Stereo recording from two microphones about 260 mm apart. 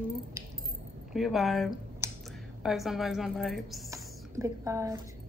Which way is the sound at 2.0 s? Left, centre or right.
Centre.